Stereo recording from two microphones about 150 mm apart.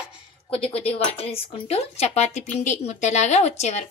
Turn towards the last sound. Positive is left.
turn(degrees=50)  # may be behind; listen again after turning